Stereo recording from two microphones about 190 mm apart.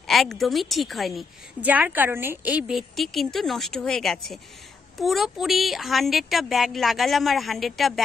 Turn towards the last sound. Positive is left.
turn(degrees=0)  # may be behind; listen again after turning